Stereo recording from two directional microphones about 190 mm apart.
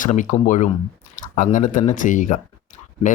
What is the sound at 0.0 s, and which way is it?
Speech, 40° left (ahead or behind).